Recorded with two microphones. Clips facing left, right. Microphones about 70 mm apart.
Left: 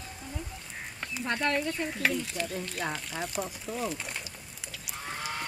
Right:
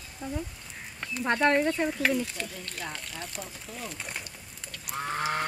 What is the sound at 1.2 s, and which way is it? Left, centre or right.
Speech, right.